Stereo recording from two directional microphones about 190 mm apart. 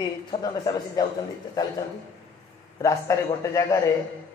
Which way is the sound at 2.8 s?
15° left (ahead or behind).